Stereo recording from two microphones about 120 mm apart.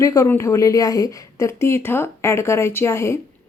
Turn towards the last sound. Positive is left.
turn(degrees=20)  # may be behind; listen again after turning